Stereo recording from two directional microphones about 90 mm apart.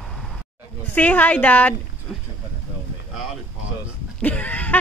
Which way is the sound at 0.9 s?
20° left (ahead or behind).